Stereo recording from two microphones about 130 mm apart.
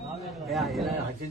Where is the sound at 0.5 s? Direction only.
Centre (ahead or behind).